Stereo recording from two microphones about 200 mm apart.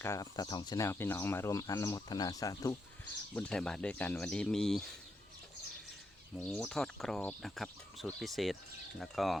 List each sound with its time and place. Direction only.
0.0 s speech: 15° left (ahead or behind)
3.3 s speech: 5° left (ahead or behind)
6.3 s speech: 5° left (ahead or behind)